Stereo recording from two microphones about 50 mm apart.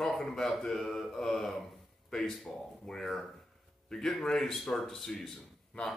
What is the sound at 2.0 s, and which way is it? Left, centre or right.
Speech, centre.